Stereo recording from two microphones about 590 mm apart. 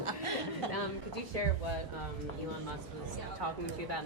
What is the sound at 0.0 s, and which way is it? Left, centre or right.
Chuckle, right.